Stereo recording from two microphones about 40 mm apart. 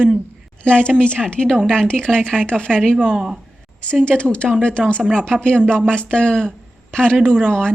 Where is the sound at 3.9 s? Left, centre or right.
Left.